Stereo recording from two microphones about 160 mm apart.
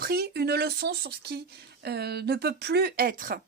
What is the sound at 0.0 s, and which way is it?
Speech, 70° right (ahead or behind).